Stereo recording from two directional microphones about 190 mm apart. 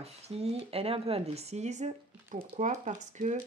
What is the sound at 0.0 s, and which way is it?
Speech, 35° right (ahead or behind).